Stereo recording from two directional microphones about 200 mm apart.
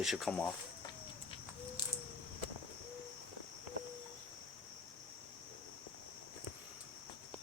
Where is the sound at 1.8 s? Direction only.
20° left (ahead or behind).